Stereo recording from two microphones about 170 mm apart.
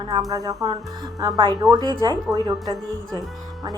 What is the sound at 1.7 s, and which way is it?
Speech, 25° right (ahead or behind).